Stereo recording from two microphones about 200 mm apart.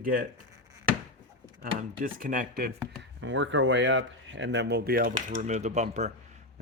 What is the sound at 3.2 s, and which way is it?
Speech, 70° right (ahead or behind).